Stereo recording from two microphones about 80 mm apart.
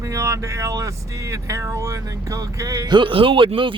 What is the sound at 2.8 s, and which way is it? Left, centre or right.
Speech, right.